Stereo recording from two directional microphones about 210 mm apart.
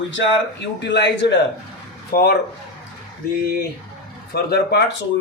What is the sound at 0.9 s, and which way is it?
Speech, 55° left (ahead or behind).